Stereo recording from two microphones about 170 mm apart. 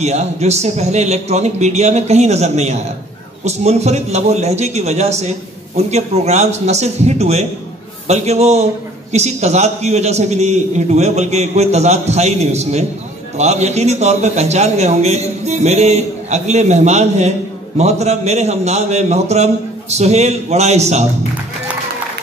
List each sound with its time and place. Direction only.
0.0 s a man's voice: 40° right (ahead or behind)